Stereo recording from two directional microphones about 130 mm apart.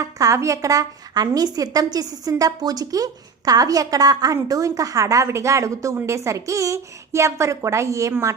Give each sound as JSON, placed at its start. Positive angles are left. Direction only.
{"t": 0.0, "sound": "a woman's voice", "side_deg": -25}